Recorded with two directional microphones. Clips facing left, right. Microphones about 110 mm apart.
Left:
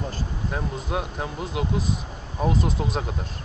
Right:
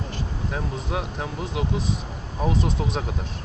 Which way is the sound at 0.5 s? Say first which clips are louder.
Left 1 dB; centre (ahead or behind).